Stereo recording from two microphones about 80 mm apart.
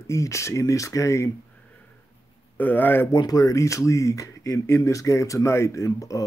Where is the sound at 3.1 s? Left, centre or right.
Left.